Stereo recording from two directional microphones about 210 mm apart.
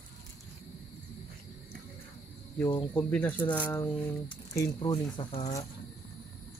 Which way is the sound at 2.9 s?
10° left (ahead or behind).